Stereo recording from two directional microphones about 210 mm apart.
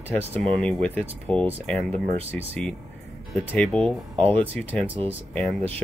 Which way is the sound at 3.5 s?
Centre (ahead or behind).